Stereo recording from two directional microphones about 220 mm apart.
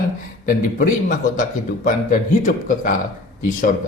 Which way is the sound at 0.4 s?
40° left (ahead or behind).